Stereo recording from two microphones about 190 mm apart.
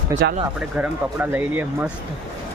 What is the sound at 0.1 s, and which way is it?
Speech, 20° right (ahead or behind).